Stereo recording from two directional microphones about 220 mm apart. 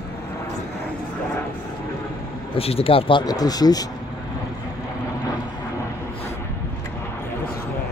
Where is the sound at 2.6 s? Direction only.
25° left (ahead or behind).